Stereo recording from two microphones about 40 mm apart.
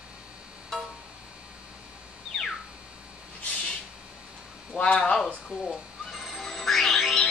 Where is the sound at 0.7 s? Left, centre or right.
Centre.